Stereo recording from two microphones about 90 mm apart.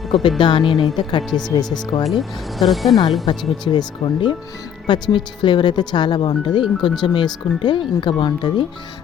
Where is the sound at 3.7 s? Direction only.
55° left (ahead or behind).